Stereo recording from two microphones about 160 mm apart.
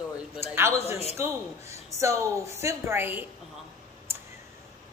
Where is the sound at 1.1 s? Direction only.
20° right (ahead or behind).